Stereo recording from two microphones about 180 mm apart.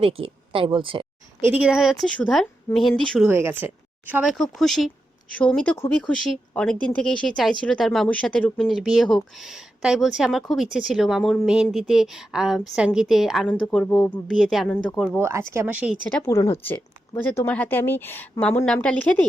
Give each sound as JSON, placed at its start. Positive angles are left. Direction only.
{"t": 0.0, "sound": "speech", "side_deg": -30}
{"t": 1.4, "sound": "speech", "side_deg": -10}
{"t": 3.2, "sound": "speech", "side_deg": -10}
{"t": 15.0, "sound": "speech", "side_deg": -10}
{"t": 16.0, "sound": "speech", "side_deg": 5}
{"t": 16.3, "sound": "a woman's voice", "side_deg": 15}